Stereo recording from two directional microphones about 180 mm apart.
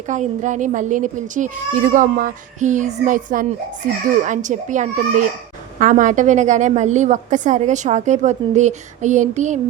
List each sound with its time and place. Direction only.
0.1 s a woman's voice: 45° right (ahead or behind)